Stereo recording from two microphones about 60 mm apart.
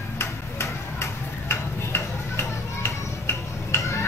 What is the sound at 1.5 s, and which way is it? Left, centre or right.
Tick-tock, left.